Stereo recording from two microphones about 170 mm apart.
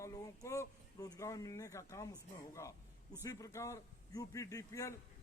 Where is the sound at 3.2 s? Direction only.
20° left (ahead or behind).